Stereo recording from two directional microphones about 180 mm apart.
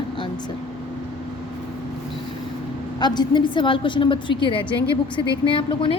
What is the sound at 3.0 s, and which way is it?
A woman's voice, 25° left (ahead or behind).